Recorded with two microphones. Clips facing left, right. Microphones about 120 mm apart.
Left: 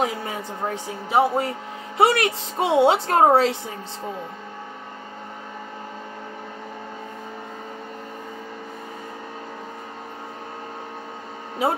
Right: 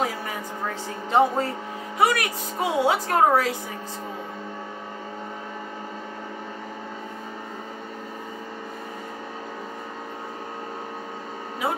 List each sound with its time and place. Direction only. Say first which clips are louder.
0.0 s a sound: left 2 dB; 25° left (ahead or behind)
1.1 s speech: left 1 dB; 10° left (ahead or behind)
2.0 s speech: left 4 dB; 25° left (ahead or behind)